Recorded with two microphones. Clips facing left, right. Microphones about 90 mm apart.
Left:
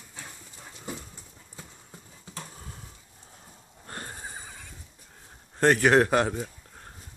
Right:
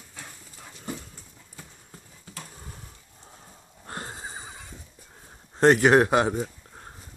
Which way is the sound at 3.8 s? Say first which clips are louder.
Right 3 dB; 20° right (ahead or behind).